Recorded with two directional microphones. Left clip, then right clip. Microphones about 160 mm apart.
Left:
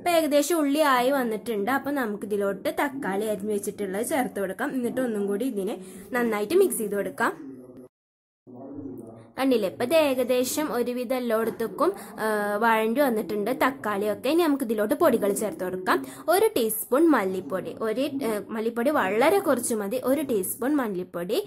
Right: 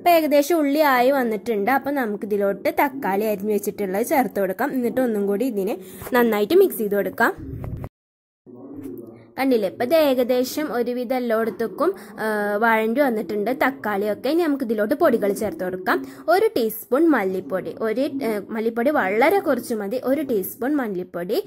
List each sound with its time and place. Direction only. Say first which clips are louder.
0.0 s a woman's voice: right 6 dB; 25° right (ahead or behind)
0.8 s a woman's voice: right 5 dB; 35° right (ahead or behind)
9.4 s a woman's voice: right 4 dB; 15° right (ahead or behind)
10.0 s a woman's voice: right 5 dB; 35° right (ahead or behind)
10.3 s a woman's voice: right 3 dB; 15° right (ahead or behind)